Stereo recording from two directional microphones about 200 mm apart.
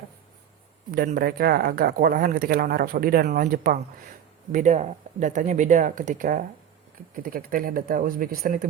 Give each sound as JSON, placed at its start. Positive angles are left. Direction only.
{"t": 0.9, "sound": "speech", "side_deg": -45}